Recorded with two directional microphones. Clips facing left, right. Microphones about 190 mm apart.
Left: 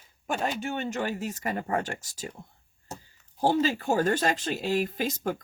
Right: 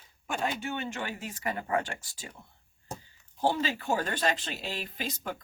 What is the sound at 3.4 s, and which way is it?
Speech, 40° left (ahead or behind).